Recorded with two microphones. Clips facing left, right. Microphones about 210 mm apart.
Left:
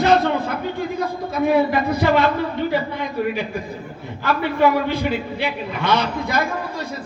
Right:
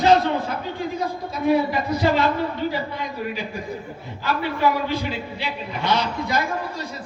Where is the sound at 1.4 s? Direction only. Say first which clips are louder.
Left 2 dB; 55° left (ahead or behind).